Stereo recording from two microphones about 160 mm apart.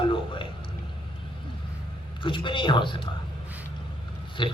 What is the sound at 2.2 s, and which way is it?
Speech, 30° left (ahead or behind).